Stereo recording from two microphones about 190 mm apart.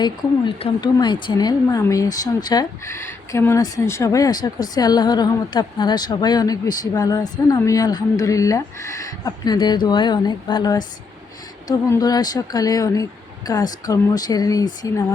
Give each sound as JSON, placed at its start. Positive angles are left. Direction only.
{"t": 0.0, "sound": "speech", "side_deg": 25}
{"t": 11.9, "sound": "speech", "side_deg": 20}